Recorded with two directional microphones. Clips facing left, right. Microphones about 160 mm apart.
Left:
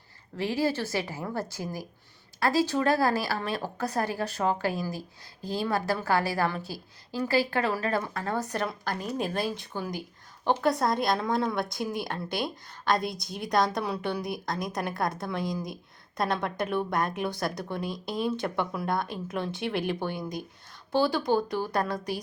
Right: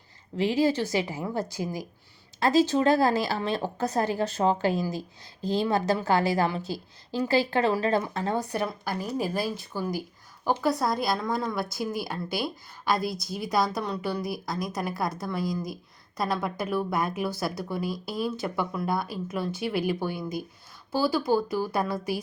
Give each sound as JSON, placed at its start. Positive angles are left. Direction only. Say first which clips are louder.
{"t": 0.3, "sound": "a woman's voice", "louder": "right 4 dB", "side_deg": -20}